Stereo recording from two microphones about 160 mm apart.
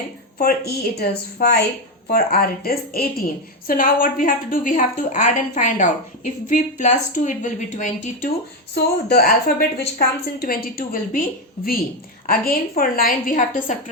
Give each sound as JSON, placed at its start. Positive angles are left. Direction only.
{"t": 0.3, "sound": "a woman's voice", "side_deg": 80}
{"t": 8.7, "sound": "speech", "side_deg": 85}
{"t": 10.4, "sound": "a woman's voice", "side_deg": 65}